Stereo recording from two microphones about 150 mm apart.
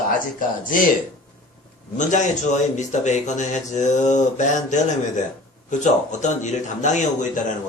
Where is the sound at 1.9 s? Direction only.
55° left (ahead or behind).